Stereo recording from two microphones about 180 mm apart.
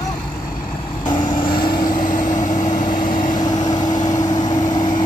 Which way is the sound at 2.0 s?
45° left (ahead or behind).